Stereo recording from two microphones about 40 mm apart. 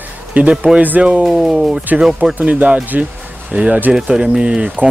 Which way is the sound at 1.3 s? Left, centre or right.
Centre.